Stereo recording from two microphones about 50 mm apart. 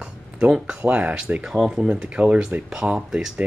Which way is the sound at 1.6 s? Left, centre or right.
Centre.